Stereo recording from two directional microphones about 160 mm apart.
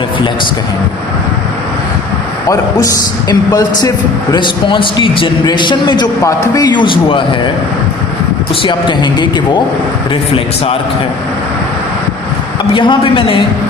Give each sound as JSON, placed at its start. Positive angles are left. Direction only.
{"t": 2.5, "sound": "a man's voice", "side_deg": 20}
{"t": 8.6, "sound": "a man's voice", "side_deg": 30}
{"t": 12.7, "sound": "a man's voice", "side_deg": 30}